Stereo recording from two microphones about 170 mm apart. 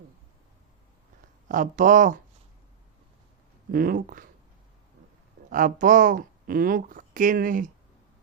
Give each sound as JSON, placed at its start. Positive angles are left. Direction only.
{"t": 1.5, "sound": "speech", "side_deg": -50}
{"t": 3.7, "sound": "speech", "side_deg": -60}
{"t": 5.5, "sound": "speech", "side_deg": -50}